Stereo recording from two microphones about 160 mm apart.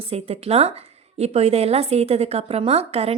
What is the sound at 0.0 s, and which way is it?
A woman's voice, 40° right (ahead or behind).